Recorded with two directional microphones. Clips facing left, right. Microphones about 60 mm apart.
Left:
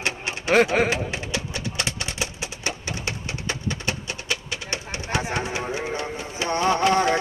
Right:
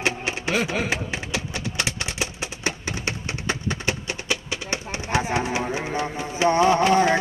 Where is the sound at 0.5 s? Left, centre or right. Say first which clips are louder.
Left 8 dB; left.